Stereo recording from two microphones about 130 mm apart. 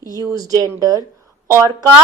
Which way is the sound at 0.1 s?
25° right (ahead or behind).